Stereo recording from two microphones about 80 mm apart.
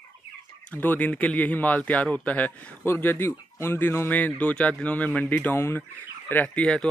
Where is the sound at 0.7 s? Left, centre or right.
Centre.